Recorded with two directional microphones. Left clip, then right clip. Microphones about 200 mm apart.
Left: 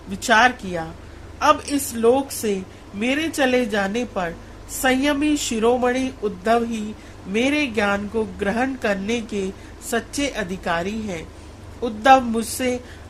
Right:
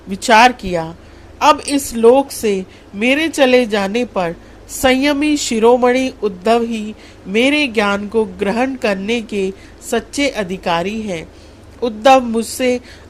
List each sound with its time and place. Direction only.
0.1 s a woman's voice: 20° right (ahead or behind)